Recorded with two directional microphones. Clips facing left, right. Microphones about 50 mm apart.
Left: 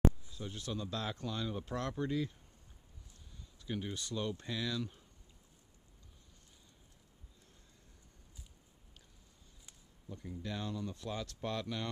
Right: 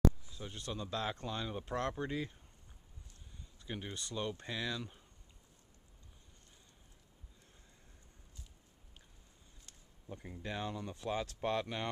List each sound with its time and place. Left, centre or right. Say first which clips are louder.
0.3 s speech: left 2 dB; centre
3.5 s speech: left 3 dB; centre
10.0 s speech: left 1 dB; right